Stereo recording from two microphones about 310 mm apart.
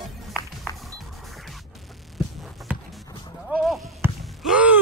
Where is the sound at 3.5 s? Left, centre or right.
Centre.